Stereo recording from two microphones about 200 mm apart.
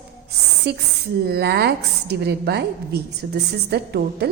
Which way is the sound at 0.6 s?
55° right (ahead or behind).